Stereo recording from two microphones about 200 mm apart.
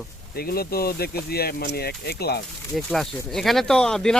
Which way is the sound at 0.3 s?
50° left (ahead or behind).